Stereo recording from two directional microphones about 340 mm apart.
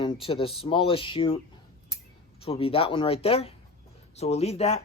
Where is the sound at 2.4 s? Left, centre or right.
Centre.